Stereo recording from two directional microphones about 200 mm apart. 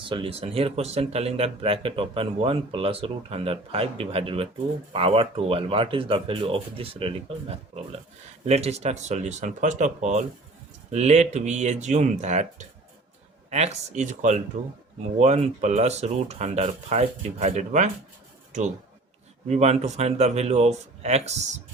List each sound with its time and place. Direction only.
0.0 s speech: 25° right (ahead or behind)